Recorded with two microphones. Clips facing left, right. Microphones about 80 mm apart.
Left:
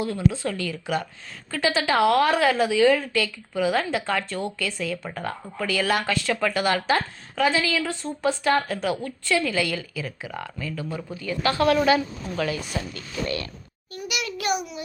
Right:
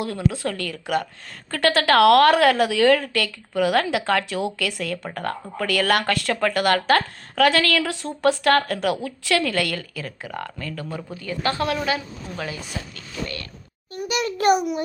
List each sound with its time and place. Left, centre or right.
0.0 s speech: right
9.0 s speech: right
11.2 s a child's voice: right
12.2 s speech: right
13.2 s speech: centre
13.9 s a child's voice: right